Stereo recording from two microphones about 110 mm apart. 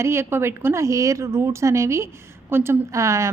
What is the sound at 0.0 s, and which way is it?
A woman's voice, 25° right (ahead or behind).